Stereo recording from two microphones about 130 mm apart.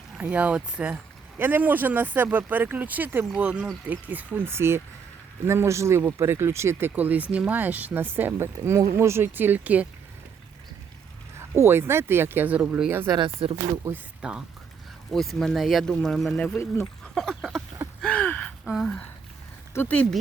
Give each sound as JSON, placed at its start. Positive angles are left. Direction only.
{"t": 0.2, "sound": "speech", "side_deg": -10}
{"t": 11.3, "sound": "speech", "side_deg": -20}
{"t": 13.1, "sound": "speech", "side_deg": -40}
{"t": 14.2, "sound": "speech", "side_deg": -5}
{"t": 16.6, "sound": "speech", "side_deg": 20}
{"t": 17.2, "sound": "a sound", "side_deg": 0}
{"t": 18.0, "sound": "gasp", "side_deg": 10}
{"t": 19.7, "sound": "speech", "side_deg": 15}